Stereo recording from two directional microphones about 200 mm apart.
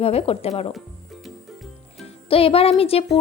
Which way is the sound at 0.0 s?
30° left (ahead or behind).